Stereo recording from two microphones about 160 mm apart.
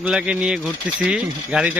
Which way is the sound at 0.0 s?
5° right (ahead or behind).